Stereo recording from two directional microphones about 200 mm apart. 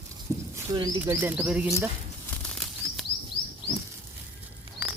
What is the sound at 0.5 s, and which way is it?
Speech, 20° right (ahead or behind).